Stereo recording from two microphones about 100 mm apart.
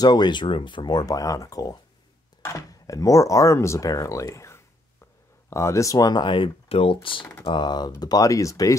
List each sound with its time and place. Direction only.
0.0 s speech: 45° left (ahead or behind)
6.7 s speech: 70° left (ahead or behind)
7.4 s speech: 50° left (ahead or behind); by 8.7 s 35° left (ahead or behind)